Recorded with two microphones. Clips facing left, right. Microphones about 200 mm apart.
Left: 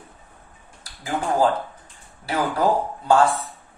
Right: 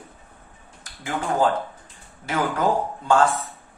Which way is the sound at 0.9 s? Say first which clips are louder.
Left 2 dB; 35° left (ahead or behind).